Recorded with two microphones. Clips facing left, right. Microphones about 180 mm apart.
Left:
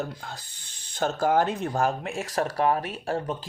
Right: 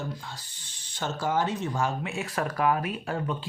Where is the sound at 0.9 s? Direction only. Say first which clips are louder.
Left 5 dB; 55° left (ahead or behind).